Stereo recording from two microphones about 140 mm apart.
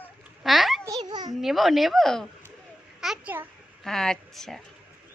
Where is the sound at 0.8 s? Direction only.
30° right (ahead or behind).